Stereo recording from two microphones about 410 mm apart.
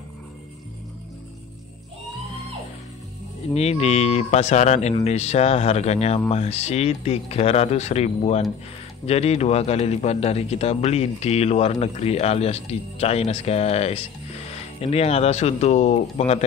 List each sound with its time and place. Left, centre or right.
3.5 s a man's voice: centre